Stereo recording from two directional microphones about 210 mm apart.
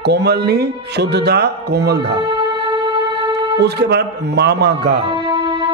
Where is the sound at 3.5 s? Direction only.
50° right (ahead or behind).